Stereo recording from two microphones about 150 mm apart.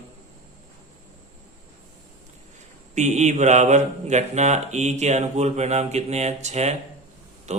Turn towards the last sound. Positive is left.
turn(degrees=-50)  # may be behind; listen again after turning